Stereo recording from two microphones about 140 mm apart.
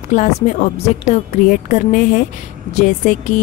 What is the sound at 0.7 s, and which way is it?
Speech, 50° left (ahead or behind).